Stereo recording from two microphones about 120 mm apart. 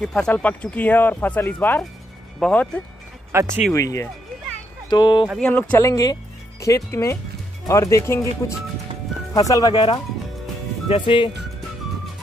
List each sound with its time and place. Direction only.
0.0 s speech: 5° left (ahead or behind)
3.3 s speech: 25° right (ahead or behind)
3.7 s speech: 25° left (ahead or behind)
4.8 s speech: 35° left (ahead or behind)
5.4 s speech: 10° left (ahead or behind)
5.8 s speech: 30° left (ahead or behind)
9.8 s speech: 45° left (ahead or behind)